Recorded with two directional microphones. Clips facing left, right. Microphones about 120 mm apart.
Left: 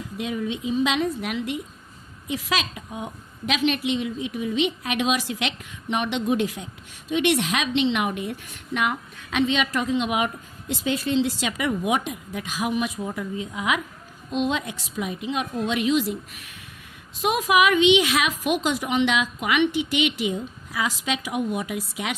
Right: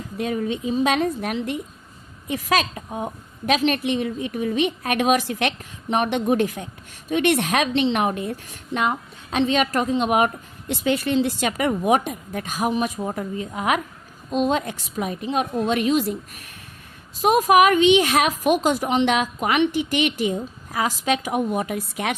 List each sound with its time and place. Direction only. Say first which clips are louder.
0.2 s a woman's voice: right 4 dB; 45° right (ahead or behind); by 9.5 s 30° right (ahead or behind)
9.5 s a woman's voice: right 3 dB; 45° right (ahead or behind)